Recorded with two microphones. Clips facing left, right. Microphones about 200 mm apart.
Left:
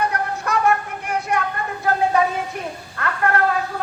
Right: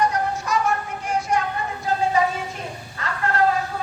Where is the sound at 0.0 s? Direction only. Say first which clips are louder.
Right 1 dB; 60° left (ahead or behind).